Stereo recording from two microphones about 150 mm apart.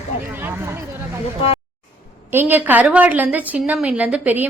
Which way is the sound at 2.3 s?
15° right (ahead or behind).